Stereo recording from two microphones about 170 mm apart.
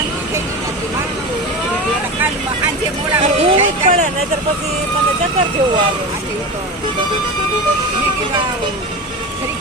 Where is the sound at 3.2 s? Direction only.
45° right (ahead or behind).